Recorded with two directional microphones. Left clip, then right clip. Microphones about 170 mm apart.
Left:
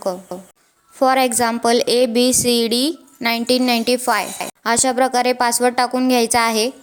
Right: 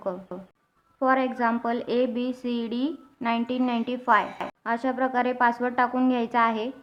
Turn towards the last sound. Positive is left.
turn(degrees=35)  # may be behind; listen again after turning